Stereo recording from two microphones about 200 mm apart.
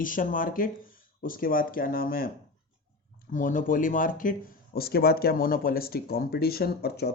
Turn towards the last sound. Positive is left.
turn(degrees=55)  # may be behind; listen again after turning